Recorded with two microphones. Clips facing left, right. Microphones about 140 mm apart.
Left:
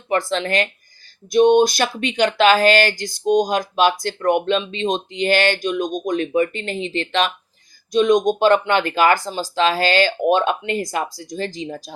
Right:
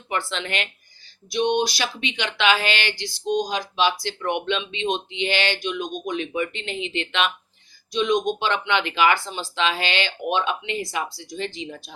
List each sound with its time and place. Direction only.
0.1 s speech: 40° left (ahead or behind)